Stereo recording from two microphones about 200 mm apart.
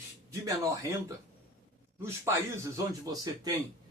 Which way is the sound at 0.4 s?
15° right (ahead or behind).